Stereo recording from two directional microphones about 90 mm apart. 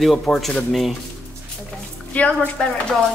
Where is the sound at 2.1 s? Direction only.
15° left (ahead or behind).